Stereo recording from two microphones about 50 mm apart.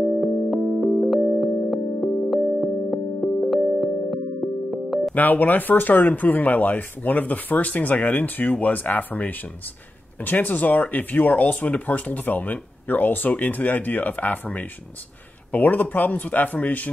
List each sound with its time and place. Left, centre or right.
0.0 s music: centre
5.1 s speech: left